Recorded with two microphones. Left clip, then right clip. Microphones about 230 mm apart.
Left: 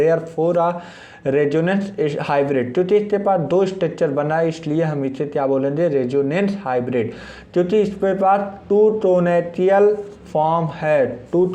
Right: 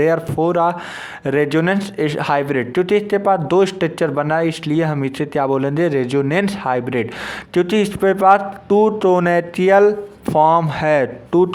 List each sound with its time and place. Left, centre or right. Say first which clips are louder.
0.0 s a man's voice: right 1 dB; right